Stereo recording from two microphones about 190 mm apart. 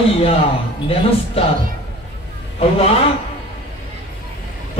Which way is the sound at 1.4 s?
30° left (ahead or behind).